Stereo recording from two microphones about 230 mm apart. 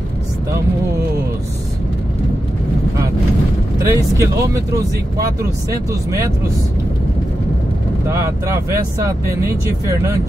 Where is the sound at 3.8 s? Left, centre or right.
Centre.